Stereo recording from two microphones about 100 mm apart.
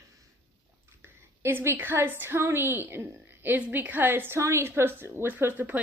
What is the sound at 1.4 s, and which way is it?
A woman's voice, 25° right (ahead or behind).